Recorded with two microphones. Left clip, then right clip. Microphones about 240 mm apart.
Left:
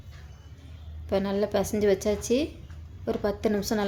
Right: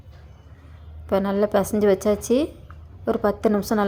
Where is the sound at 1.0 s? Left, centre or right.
Centre.